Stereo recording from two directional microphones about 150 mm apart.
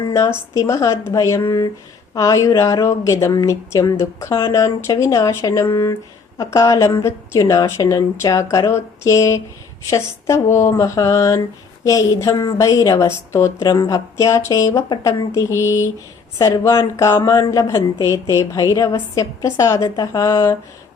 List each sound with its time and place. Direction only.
0.0 s a woman's voice: 20° left (ahead or behind)